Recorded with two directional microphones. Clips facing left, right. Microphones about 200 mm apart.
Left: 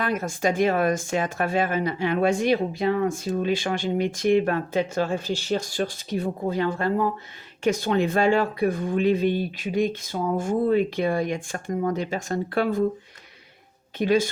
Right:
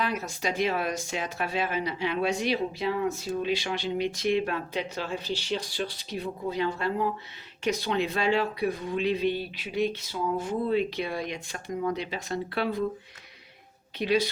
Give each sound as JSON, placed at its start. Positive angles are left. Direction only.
{"t": 0.0, "sound": "speech", "side_deg": 50}
{"t": 14.0, "sound": "speech", "side_deg": 50}